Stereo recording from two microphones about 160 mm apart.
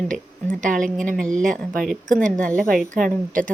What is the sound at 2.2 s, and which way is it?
Speech, 55° right (ahead or behind).